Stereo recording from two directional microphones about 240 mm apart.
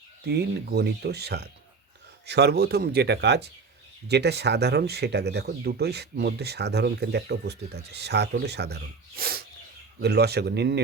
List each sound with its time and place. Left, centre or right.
0.3 s speech: right